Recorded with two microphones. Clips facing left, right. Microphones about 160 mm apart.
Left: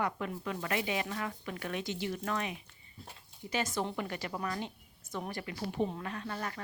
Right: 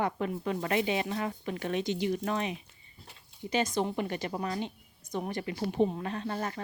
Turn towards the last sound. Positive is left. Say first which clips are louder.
# right 5 dB
turn(degrees=-25)  # may be behind; listen again after turning